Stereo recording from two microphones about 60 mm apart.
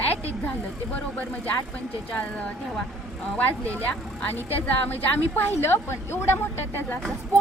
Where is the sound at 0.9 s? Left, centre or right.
Left.